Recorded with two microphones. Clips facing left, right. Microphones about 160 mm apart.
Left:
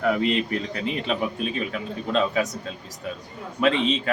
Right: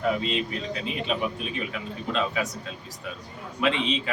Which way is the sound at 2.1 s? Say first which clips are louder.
Left 5 dB; 40° left (ahead or behind).